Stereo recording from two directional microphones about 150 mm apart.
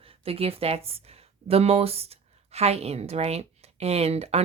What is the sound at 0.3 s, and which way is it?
A woman's voice, 40° right (ahead or behind).